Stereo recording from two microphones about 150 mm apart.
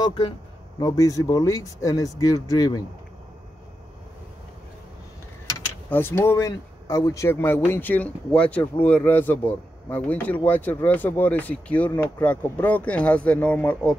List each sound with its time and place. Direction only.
0.0 s speech: 30° left (ahead or behind)
5.9 s speech: 15° left (ahead or behind)